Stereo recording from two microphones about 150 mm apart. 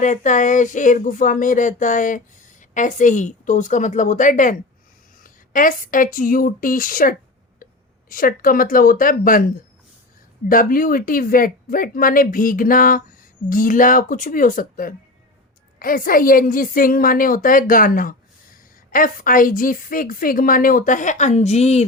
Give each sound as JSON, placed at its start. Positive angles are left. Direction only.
{"t": 0.0, "sound": "a woman's voice", "side_deg": 55}
{"t": 10.5, "sound": "a woman's voice", "side_deg": 65}